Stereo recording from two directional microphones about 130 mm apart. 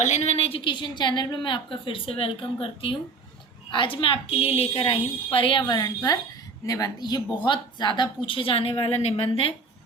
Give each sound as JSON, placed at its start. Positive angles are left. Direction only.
{"t": 0.0, "sound": "a woman's voice", "side_deg": 60}